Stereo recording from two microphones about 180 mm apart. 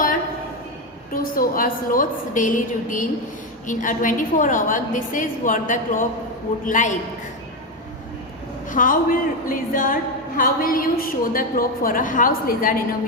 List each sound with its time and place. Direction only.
1.1 s a woman's voice: 50° left (ahead or behind)
8.7 s a woman's voice: 50° left (ahead or behind)